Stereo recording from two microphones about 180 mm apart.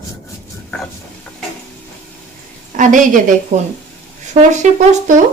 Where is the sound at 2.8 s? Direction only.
45° right (ahead or behind).